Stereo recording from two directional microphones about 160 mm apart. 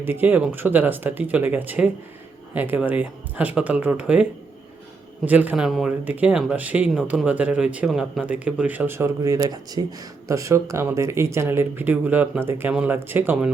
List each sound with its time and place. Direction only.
0.0 s speech: 15° right (ahead or behind)